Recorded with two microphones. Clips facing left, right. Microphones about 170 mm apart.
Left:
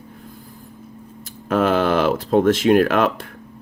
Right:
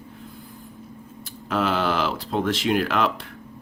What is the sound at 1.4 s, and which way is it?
Speech, 50° left (ahead or behind).